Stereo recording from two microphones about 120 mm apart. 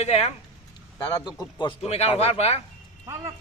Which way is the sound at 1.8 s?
60° left (ahead or behind).